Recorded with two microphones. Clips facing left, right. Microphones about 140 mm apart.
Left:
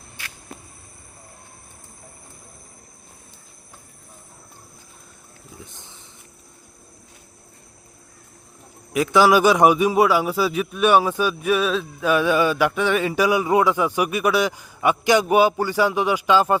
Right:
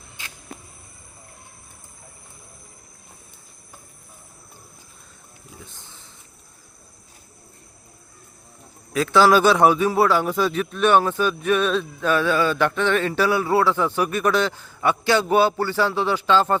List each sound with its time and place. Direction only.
0.2 s cricket: 20° right (ahead or behind)
5.5 s a sound: 15° left (ahead or behind)
8.9 s a man's voice: 15° left (ahead or behind)